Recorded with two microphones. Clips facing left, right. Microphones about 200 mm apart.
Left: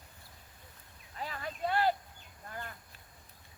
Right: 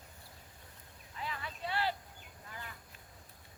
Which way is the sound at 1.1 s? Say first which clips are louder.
Left 3 dB; 40° left (ahead or behind).